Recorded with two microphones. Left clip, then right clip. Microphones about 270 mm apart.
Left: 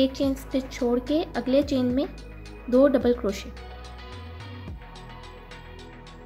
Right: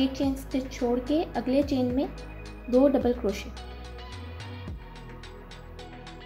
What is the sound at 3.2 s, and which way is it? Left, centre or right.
Speech, left.